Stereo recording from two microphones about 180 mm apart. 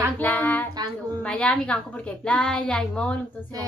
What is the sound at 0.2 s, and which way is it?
Child singing, 10° left (ahead or behind).